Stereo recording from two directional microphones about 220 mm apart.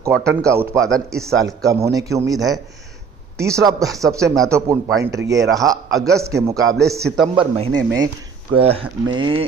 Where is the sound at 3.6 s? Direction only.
15° right (ahead or behind).